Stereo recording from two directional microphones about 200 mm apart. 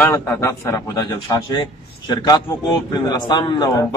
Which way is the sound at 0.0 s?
10° left (ahead or behind).